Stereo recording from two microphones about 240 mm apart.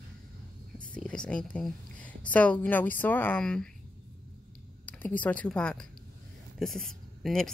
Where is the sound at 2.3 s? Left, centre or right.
Centre.